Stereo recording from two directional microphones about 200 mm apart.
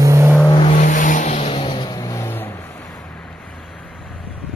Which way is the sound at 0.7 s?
40° left (ahead or behind).